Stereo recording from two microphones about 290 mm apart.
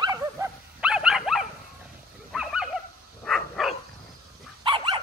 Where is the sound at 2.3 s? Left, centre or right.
Centre.